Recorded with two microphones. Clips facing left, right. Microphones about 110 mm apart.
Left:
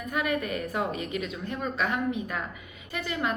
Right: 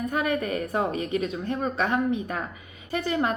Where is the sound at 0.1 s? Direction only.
35° right (ahead or behind).